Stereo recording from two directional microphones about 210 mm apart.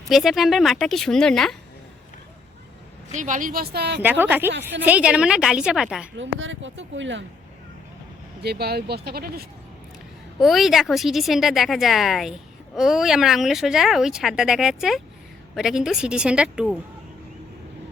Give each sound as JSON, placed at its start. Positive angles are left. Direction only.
{"t": 0.1, "sound": "speech", "side_deg": 0}
{"t": 3.1, "sound": "speech", "side_deg": -35}
{"t": 4.0, "sound": "speech", "side_deg": -10}
{"t": 6.1, "sound": "speech", "side_deg": -65}
{"t": 8.4, "sound": "speech", "side_deg": -50}
{"t": 10.4, "sound": "speech", "side_deg": 0}